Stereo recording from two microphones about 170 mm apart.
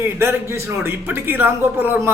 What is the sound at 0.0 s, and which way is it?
Speech, 15° right (ahead or behind).